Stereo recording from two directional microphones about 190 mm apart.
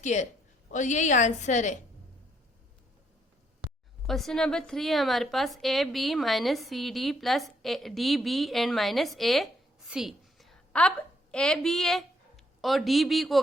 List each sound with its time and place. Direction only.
0.0 s a woman's voice: 40° left (ahead or behind)
4.0 s a woman's voice: centre (ahead or behind)